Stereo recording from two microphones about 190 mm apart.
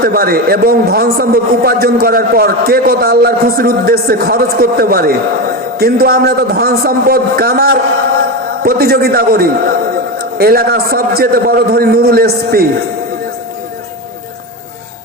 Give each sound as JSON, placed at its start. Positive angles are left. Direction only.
{"t": 0.0, "sound": "a man's voice", "side_deg": -50}